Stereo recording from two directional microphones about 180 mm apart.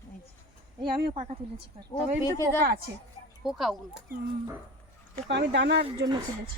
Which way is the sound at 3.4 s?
Centre (ahead or behind).